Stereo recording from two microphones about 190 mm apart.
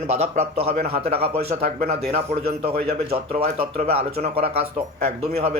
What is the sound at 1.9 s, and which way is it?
Speech, 30° right (ahead or behind).